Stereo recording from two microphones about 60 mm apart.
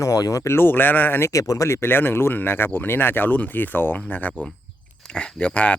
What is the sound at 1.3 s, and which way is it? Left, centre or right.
Speech, left.